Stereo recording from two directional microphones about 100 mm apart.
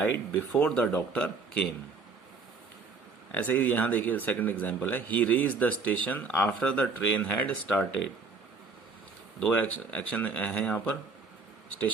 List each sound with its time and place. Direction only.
0.6 s speech: 15° left (ahead or behind)
3.3 s speech: 20° left (ahead or behind)
9.4 s speech: 15° left (ahead or behind)